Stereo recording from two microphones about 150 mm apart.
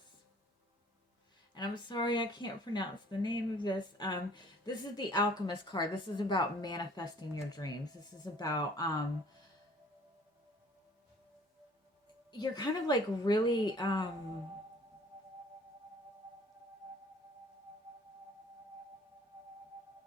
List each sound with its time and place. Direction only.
1.5 s speech: 30° left (ahead or behind)
12.3 s speech: 30° left (ahead or behind)